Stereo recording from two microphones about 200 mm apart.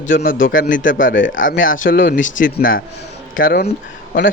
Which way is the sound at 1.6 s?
45° left (ahead or behind).